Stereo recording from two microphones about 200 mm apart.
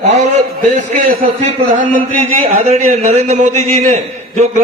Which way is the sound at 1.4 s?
40° right (ahead or behind).